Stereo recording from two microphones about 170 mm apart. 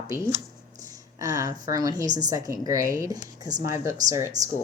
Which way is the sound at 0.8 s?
20° right (ahead or behind).